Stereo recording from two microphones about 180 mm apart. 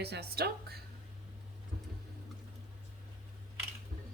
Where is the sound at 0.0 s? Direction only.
65° right (ahead or behind).